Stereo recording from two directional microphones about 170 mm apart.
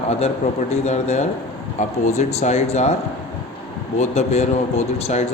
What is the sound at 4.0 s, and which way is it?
A man's voice, 40° left (ahead or behind).